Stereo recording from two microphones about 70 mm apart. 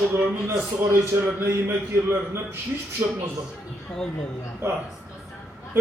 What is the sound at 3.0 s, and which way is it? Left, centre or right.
Speech, right.